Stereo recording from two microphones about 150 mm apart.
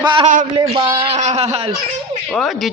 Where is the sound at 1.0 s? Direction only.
45° right (ahead or behind).